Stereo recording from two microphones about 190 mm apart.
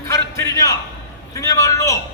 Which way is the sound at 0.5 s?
15° left (ahead or behind).